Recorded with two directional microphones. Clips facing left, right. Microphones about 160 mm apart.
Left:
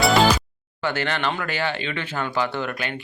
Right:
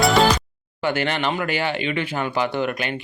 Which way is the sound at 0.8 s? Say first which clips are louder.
Right 3 dB; 15° right (ahead or behind).